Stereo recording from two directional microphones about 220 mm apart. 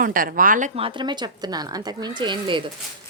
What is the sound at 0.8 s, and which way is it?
Speech, 25° right (ahead or behind).